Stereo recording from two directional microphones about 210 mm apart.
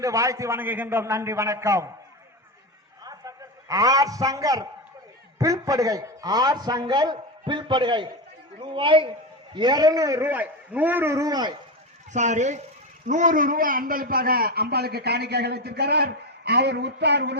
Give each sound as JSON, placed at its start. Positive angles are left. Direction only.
{"t": 0.0, "sound": "a man's voice", "side_deg": -15}
{"t": 3.0, "sound": "a sound", "side_deg": -15}
{"t": 5.4, "sound": "a man's voice", "side_deg": -15}
{"t": 12.1, "sound": "a man's voice", "side_deg": -35}